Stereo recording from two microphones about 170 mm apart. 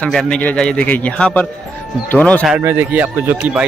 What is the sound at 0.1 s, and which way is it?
A man's voice, 5° left (ahead or behind).